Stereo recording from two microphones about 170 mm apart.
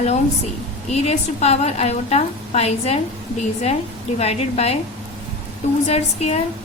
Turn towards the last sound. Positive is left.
turn(degrees=40)  # may be behind; listen again after turning